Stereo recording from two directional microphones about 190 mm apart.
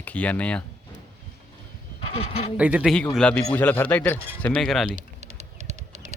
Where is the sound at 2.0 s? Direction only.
35° left (ahead or behind).